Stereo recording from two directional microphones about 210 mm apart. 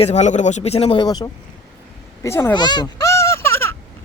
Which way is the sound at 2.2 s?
10° left (ahead or behind).